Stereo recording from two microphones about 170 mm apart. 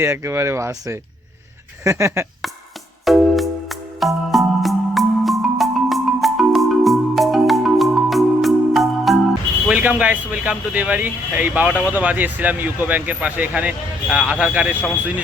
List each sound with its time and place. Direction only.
0.0 s speech: 15° right (ahead or behind)
3.0 s music: centre (ahead or behind)
9.6 s speech: 10° right (ahead or behind)